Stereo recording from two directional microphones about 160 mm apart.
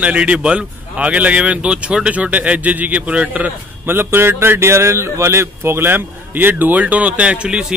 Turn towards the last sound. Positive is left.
turn(degrees=-5)  # may be behind; listen again after turning